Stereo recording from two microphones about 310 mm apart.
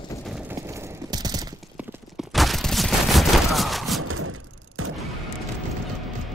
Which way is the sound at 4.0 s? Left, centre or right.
Right.